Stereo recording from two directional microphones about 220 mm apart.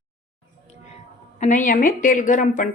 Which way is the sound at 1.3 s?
35° left (ahead or behind).